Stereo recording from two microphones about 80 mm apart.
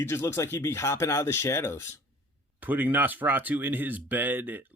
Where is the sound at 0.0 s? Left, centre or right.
Left.